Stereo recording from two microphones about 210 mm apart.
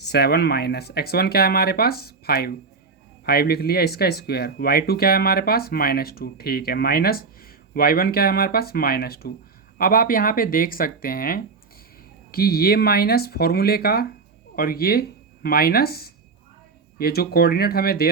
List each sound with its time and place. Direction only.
0.1 s speech: 50° left (ahead or behind)